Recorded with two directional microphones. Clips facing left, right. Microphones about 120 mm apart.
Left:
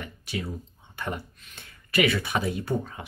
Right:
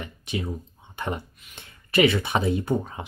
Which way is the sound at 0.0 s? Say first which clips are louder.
Right 3 dB; 20° right (ahead or behind).